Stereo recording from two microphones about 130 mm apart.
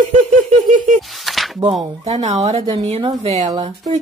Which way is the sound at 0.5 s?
80° right.